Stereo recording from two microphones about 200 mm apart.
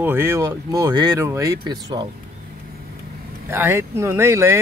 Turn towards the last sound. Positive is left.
turn(degrees=-15)  # may be behind; listen again after turning